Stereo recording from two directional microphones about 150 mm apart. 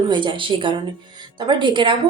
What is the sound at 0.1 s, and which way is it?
A woman's voice, 30° right (ahead or behind).